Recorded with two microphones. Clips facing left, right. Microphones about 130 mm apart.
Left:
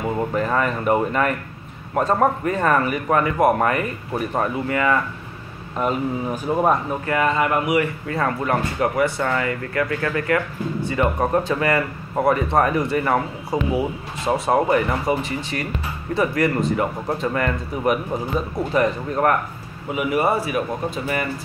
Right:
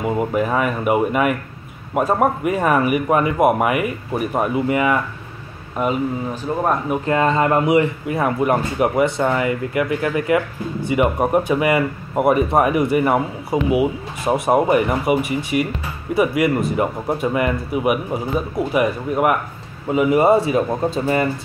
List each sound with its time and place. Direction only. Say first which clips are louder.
0.0 s speech: right 3 dB; 10° right (ahead or behind)
5.8 s speech: right 2 dB; 5° right (ahead or behind)
6.3 s speech: left 3 dB; 10° left (ahead or behind)
6.9 s speech: right 3 dB; 25° right (ahead or behind)
19.9 s speech: right 6 dB; 25° right (ahead or behind)